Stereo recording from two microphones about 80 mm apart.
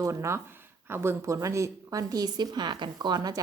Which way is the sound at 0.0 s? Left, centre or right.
Right.